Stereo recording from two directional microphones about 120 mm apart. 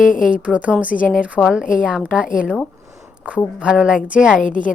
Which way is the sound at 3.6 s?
5° right (ahead or behind).